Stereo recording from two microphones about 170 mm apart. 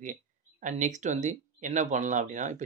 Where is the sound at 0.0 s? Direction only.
45° right (ahead or behind).